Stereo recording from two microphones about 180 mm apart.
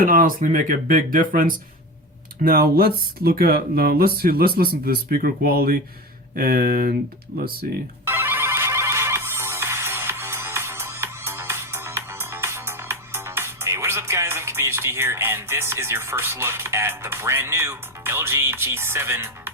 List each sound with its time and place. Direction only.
0.0 s speech: 50° right (ahead or behind)
8.0 s music: 10° right (ahead or behind)